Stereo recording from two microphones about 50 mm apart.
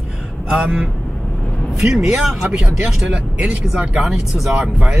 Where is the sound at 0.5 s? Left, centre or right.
Centre.